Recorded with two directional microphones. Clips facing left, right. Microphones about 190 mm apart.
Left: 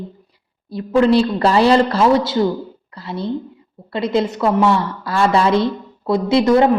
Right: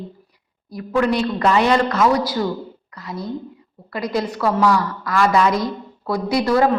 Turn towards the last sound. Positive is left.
turn(degrees=20)  # may be behind; listen again after turning